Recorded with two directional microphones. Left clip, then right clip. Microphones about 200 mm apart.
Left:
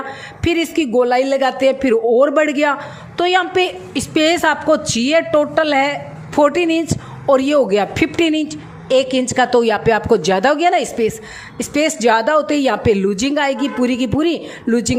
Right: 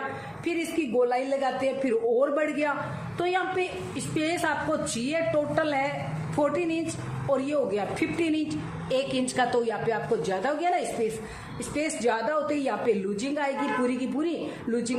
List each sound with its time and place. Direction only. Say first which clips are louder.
0.4 s a woman's voice: left 12 dB; 50° left (ahead or behind)